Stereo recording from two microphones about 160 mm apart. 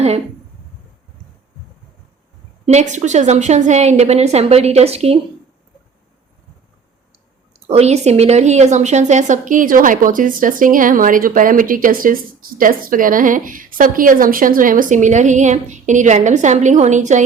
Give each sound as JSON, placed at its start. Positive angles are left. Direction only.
{"t": 2.6, "sound": "a woman's voice", "side_deg": -50}
{"t": 7.7, "sound": "a woman's voice", "side_deg": -40}